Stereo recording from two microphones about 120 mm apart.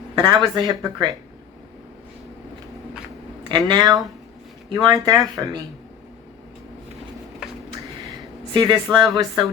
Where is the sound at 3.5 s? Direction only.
35° right (ahead or behind).